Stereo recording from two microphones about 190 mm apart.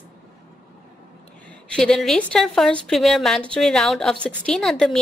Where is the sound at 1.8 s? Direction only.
Centre (ahead or behind).